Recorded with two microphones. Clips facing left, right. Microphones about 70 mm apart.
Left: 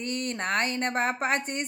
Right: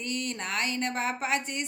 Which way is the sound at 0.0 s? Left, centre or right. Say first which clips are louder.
Left 3 dB; left.